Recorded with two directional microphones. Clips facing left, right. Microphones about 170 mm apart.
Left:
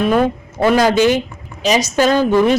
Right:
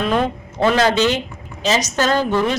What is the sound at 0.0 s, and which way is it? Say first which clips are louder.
A woman's voice: left 4 dB; 10° left (ahead or behind).